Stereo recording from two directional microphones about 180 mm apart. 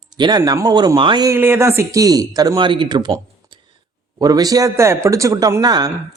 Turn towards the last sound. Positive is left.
turn(degrees=-20)  # may be behind; listen again after turning